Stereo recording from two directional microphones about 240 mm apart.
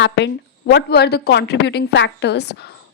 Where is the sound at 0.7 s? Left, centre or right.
Left.